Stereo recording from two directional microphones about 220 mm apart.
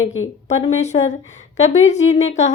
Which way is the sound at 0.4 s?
30° left (ahead or behind).